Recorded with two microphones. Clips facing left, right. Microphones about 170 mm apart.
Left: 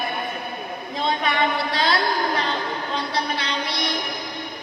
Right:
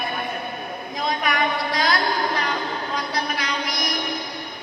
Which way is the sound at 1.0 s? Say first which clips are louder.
Left 1 dB; 30° left (ahead or behind).